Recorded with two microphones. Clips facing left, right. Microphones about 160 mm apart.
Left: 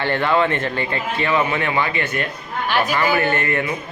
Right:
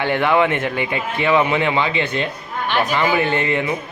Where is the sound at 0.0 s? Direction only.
15° right (ahead or behind).